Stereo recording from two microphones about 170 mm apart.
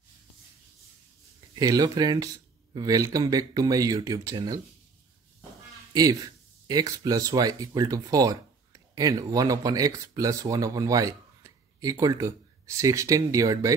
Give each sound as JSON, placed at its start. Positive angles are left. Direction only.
{"t": 1.5, "sound": "speech", "side_deg": -25}
{"t": 5.9, "sound": "speech", "side_deg": -20}